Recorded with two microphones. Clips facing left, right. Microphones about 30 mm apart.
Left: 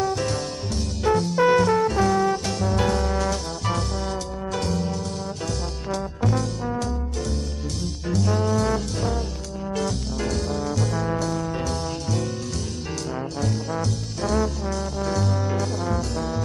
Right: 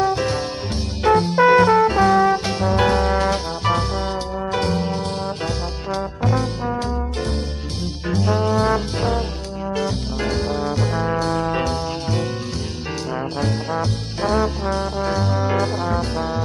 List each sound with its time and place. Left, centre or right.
0.0 s music: right
5.9 s trombone: right
8.1 s music: right
11.2 s music: right
13.4 s trombone: right